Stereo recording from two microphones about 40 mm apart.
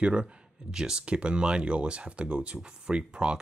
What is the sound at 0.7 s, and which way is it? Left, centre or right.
Speech, centre.